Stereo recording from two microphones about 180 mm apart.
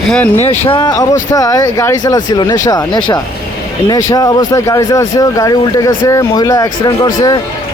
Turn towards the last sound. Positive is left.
turn(degrees=20)  # may be behind; listen again after turning